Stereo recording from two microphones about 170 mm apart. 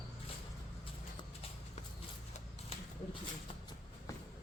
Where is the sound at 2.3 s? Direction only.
35° left (ahead or behind).